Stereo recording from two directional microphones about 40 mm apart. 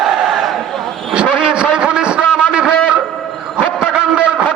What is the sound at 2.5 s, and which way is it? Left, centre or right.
Music, right.